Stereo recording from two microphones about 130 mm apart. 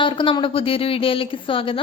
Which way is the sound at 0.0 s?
40° left (ahead or behind).